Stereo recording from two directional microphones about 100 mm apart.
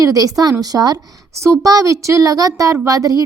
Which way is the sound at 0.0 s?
35° right (ahead or behind).